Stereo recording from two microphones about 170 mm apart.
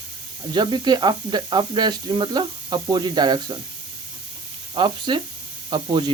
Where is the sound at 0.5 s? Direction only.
25° right (ahead or behind).